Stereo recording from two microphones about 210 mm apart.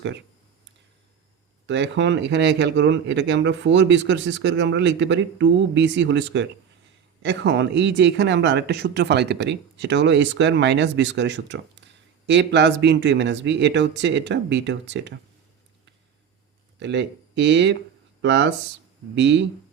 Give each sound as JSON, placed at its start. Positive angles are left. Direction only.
{"t": 1.6, "sound": "speech", "side_deg": -60}
{"t": 16.8, "sound": "speech", "side_deg": -55}